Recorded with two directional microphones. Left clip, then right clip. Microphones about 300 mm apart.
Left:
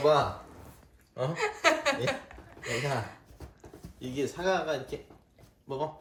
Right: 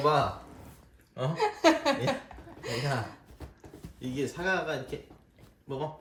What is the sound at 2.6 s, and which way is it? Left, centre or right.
Speech, centre.